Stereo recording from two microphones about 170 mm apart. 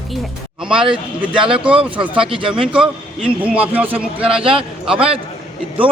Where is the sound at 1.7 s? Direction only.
30° right (ahead or behind).